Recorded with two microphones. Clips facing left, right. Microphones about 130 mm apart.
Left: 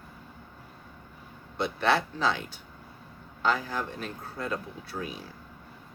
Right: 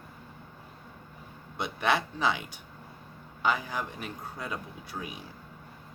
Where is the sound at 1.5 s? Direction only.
15° right (ahead or behind).